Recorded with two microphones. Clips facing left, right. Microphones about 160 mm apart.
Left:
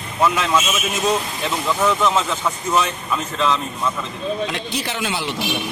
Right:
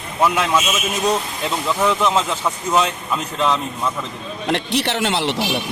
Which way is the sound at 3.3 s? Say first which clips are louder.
Right 1 dB; 5° right (ahead or behind).